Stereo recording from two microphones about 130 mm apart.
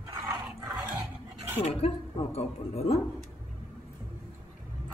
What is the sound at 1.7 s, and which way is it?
A woman's voice, 45° left (ahead or behind).